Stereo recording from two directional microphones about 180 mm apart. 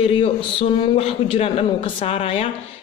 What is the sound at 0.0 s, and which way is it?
Speech, 30° left (ahead or behind).